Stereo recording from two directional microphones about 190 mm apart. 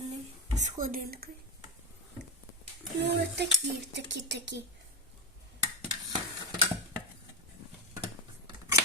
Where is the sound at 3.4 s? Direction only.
60° right (ahead or behind).